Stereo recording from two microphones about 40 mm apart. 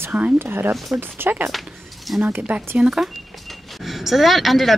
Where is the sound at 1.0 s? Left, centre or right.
Right.